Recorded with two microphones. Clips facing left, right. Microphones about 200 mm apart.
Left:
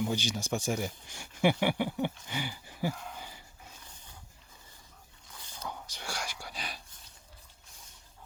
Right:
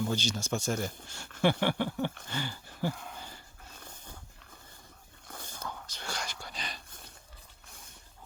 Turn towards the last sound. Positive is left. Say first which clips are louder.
# right 6 dB
turn(degrees=-55)  # may be behind; listen again after turning